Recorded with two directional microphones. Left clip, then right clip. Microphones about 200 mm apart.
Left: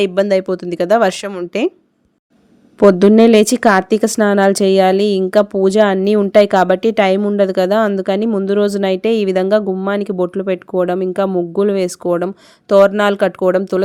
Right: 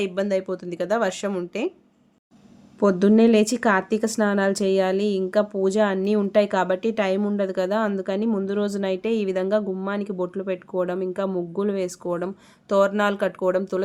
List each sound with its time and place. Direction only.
0.0 s a woman's voice: 45° left (ahead or behind)
2.7 s a woman's voice: 45° left (ahead or behind)